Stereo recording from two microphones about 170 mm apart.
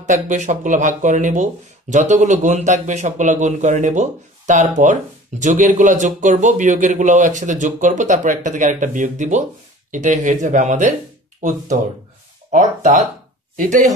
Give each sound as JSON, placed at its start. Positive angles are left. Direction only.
{"t": 0.0, "sound": "speech", "side_deg": -45}